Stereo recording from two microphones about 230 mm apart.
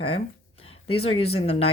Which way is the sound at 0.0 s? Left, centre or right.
Left.